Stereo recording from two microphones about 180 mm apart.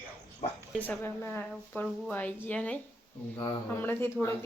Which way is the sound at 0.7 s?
10° left (ahead or behind).